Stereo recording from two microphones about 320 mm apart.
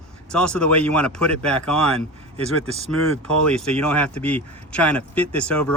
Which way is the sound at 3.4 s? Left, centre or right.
Centre.